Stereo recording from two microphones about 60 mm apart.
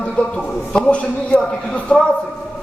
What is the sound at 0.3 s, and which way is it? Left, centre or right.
A man's voice, centre.